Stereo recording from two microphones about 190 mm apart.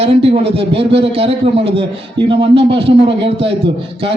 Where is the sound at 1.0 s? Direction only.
30° right (ahead or behind).